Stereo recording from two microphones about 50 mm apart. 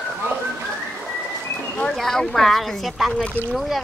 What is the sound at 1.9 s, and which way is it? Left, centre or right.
Speech, centre.